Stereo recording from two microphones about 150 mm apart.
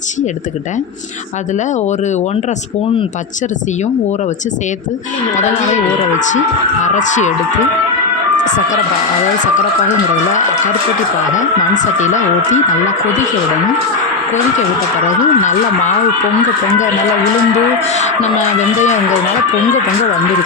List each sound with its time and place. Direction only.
6.8 s speech: 55° left (ahead or behind)
8.4 s speech: 55° left (ahead or behind)
11.3 s speech: 55° left (ahead or behind)
15.0 s speech: 55° left (ahead or behind)